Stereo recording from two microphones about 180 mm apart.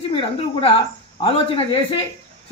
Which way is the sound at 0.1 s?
30° left (ahead or behind).